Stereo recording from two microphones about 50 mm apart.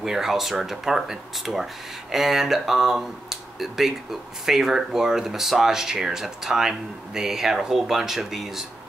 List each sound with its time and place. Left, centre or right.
0.0 s speech: centre